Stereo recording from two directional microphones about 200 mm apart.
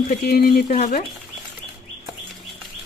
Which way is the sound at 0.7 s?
35° left (ahead or behind).